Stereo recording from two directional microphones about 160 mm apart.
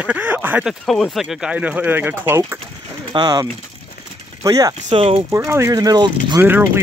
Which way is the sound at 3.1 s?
25° right (ahead or behind).